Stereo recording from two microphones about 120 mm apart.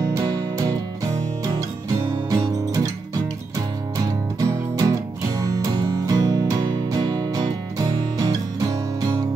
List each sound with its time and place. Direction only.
0.1 s music: 30° right (ahead or behind)
2.2 s music: 30° right (ahead or behind)
4.4 s music: 30° right (ahead or behind)